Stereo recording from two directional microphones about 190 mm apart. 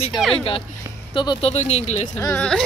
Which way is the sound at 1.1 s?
25° left (ahead or behind).